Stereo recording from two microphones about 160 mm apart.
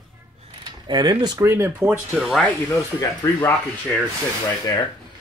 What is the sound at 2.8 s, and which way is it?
Speech, 20° left (ahead or behind).